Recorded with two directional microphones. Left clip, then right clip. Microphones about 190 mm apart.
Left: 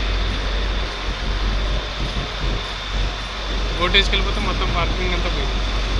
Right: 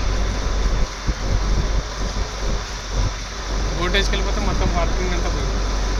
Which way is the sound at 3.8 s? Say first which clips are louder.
Left 4 dB; 30° right (ahead or behind).